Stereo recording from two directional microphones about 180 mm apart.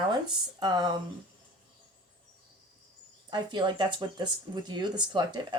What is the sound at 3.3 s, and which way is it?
Speech, 25° right (ahead or behind).